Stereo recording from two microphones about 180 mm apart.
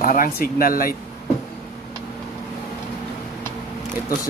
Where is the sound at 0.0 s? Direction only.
55° left (ahead or behind).